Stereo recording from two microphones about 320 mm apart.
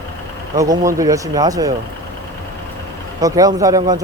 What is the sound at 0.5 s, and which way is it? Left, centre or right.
Speech, centre.